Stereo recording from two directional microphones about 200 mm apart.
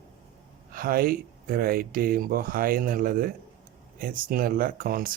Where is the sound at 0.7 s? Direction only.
45° right (ahead or behind).